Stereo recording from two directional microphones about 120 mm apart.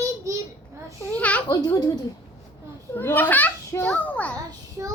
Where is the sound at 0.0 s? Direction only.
25° right (ahead or behind).